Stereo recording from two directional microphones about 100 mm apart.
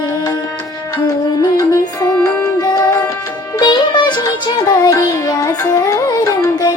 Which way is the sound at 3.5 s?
45° left (ahead or behind).